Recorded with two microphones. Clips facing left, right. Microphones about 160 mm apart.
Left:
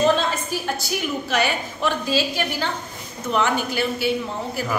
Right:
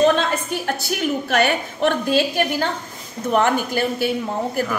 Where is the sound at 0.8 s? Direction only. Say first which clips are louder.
Right 3 dB; 55° right (ahead or behind).